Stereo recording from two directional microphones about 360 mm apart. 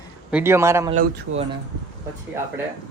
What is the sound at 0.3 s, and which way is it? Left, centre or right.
Speech, centre.